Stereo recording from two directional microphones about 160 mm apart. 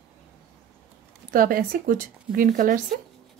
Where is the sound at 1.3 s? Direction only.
60° right (ahead or behind).